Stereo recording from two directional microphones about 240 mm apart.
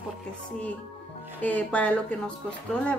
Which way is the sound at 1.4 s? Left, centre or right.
Centre.